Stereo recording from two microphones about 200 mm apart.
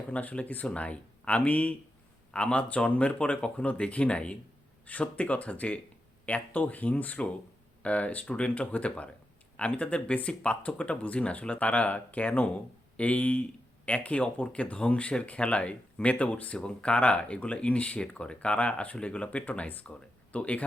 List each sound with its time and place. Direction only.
0.1 s speech: 5° left (ahead or behind)